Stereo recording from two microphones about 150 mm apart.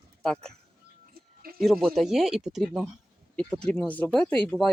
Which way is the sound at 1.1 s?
80° right.